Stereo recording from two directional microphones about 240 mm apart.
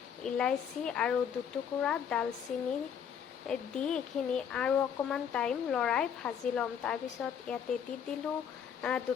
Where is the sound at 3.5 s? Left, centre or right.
Centre.